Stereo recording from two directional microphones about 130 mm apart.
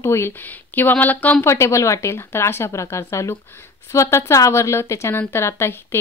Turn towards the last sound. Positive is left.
turn(degrees=20)  # may be behind; listen again after turning